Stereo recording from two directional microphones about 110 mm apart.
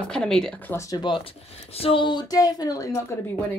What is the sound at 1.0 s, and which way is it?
Speech, 55° left (ahead or behind).